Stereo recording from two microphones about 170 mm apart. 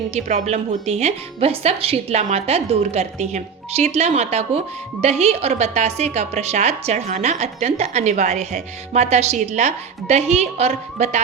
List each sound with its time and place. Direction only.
0.1 s speech: 45° right (ahead or behind)